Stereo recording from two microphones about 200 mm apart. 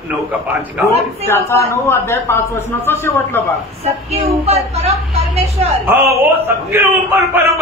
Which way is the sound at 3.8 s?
30° right (ahead or behind).